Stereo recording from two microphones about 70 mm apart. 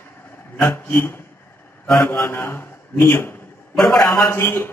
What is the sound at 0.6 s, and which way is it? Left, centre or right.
A man's voice, left.